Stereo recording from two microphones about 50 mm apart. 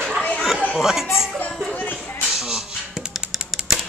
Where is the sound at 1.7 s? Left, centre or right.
Left.